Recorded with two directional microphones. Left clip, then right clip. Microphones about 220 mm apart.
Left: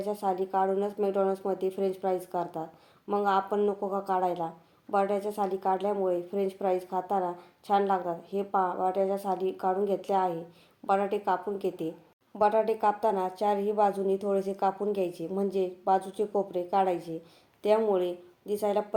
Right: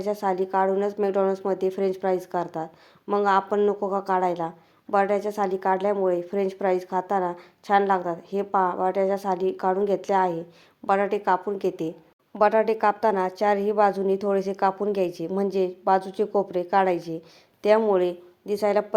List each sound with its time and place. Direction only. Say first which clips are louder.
0.0 s a woman's voice: right 5 dB; 25° right (ahead or behind)